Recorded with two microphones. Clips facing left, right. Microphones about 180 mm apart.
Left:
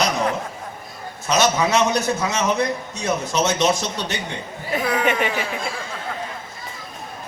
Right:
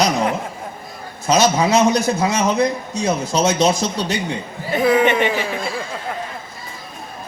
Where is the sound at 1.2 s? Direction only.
35° right (ahead or behind).